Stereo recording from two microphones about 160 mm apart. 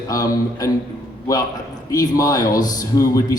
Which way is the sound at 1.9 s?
20° left (ahead or behind).